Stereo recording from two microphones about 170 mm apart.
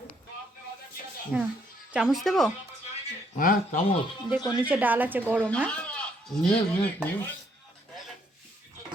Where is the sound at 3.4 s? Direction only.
55° left (ahead or behind).